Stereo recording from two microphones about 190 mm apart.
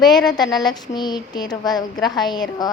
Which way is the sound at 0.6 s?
20° left (ahead or behind).